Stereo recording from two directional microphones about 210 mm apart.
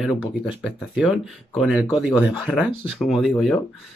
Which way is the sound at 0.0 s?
5° right (ahead or behind).